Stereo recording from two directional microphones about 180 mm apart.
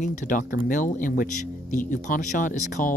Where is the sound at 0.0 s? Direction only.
45° left (ahead or behind).